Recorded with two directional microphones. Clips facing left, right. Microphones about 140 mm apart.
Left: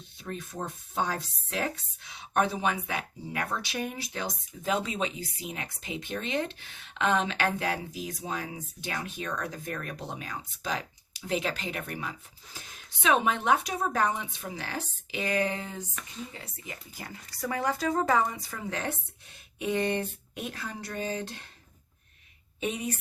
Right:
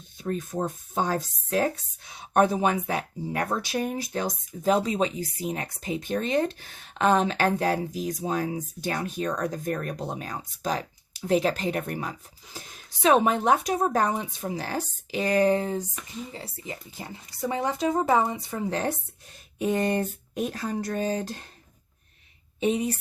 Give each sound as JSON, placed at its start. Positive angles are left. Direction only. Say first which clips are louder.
{"t": 0.2, "sound": "speech", "louder": "right 8 dB", "side_deg": -45}
{"t": 22.6, "sound": "speech", "louder": "right 7 dB", "side_deg": -30}